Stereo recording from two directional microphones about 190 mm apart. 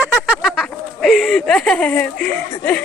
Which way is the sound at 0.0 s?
Centre (ahead or behind).